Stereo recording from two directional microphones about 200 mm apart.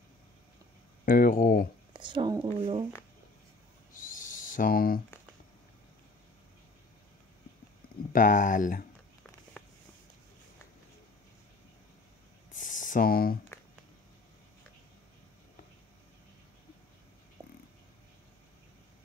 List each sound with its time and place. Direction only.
1.0 s speech: 45° left (ahead or behind)
2.0 s speech: 25° right (ahead or behind)
3.9 s owl: 40° left (ahead or behind)
8.1 s speech: 40° left (ahead or behind)
12.5 s a sound: 40° left (ahead or behind)